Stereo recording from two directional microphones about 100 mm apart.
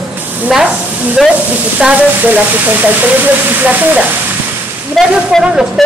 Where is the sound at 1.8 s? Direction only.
15° right (ahead or behind).